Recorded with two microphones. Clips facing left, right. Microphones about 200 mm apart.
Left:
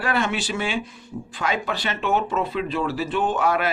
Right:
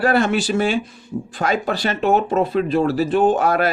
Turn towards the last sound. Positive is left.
turn(degrees=-40)  # may be behind; listen again after turning